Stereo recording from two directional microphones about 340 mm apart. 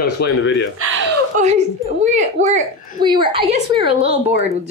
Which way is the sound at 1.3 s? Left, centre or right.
Right.